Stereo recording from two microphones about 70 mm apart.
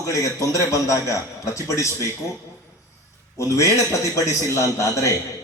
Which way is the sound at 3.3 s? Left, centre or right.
Left.